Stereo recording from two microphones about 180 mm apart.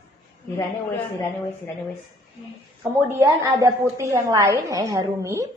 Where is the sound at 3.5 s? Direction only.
20° right (ahead or behind).